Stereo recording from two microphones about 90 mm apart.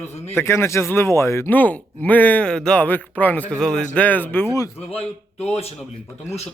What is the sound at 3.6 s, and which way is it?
Speech, 5° left (ahead or behind).